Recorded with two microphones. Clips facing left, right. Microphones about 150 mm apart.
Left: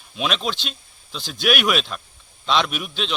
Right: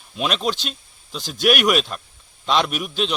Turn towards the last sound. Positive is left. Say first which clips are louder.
# right 3 dB
turn(degrees=0)  # may be behind; listen again after turning